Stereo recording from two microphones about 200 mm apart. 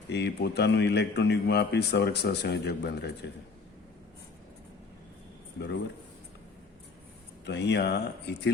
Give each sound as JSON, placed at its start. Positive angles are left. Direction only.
{"t": 0.1, "sound": "speech", "side_deg": 60}
{"t": 7.4, "sound": "speech", "side_deg": 60}